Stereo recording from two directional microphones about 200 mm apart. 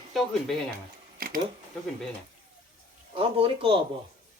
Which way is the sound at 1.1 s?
45° right (ahead or behind).